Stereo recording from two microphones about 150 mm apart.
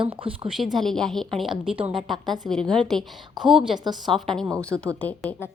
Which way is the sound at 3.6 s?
35° right (ahead or behind).